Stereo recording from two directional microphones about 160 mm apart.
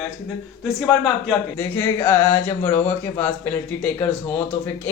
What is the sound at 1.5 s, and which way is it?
Speech, 15° left (ahead or behind).